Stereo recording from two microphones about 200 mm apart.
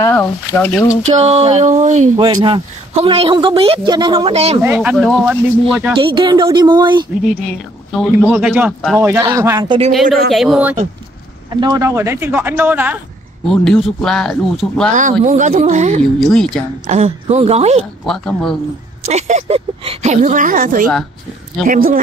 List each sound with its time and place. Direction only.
0.0 s speech: 10° left (ahead or behind)
1.0 s a man's voice: 30° right (ahead or behind)
4.6 s speech: 5° right (ahead or behind)
5.9 s a man's voice: 25° right (ahead or behind)
7.2 s speech: centre (ahead or behind)
9.2 s a man's voice: 15° right (ahead or behind)
10.3 s speech: centre (ahead or behind)
11.6 s speech: 20° right (ahead or behind)
13.5 s speech: centre (ahead or behind)
15.0 s speech: 40° right (ahead or behind)
16.0 s speech: centre (ahead or behind)
16.8 s speech: 35° right (ahead or behind)
18.0 s speech: centre (ahead or behind)
19.0 s speech: 35° right (ahead or behind)